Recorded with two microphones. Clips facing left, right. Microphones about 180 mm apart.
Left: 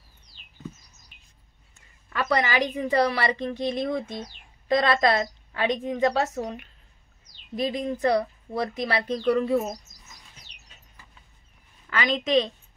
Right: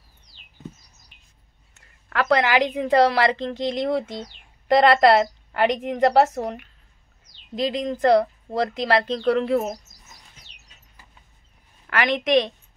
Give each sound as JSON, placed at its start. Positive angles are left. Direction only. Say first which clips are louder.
{"t": 2.0, "sound": "a woman's voice", "louder": "right 5 dB", "side_deg": -75}
{"t": 4.6, "sound": "a woman's voice", "louder": "right 6 dB", "side_deg": -75}
{"t": 7.5, "sound": "a woman's voice", "louder": "right 2 dB", "side_deg": -80}
{"t": 8.5, "sound": "a woman's voice", "louder": "right 5 dB", "side_deg": -90}
{"t": 11.9, "sound": "a woman's voice", "louder": "right 3 dB", "side_deg": -70}